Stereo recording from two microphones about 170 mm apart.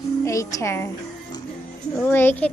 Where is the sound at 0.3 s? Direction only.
20° left (ahead or behind).